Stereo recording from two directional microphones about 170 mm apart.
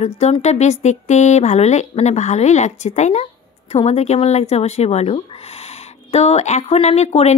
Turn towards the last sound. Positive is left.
turn(degrees=40)  # may be behind; listen again after turning